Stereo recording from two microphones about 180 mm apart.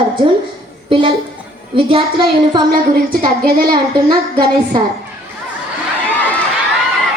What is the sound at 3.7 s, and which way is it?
A child's voice, 25° right (ahead or behind).